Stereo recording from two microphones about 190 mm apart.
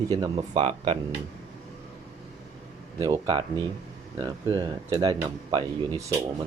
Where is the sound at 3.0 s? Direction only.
20° right (ahead or behind).